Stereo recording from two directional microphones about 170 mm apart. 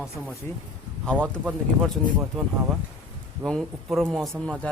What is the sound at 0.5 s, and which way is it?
Speech, 15° left (ahead or behind).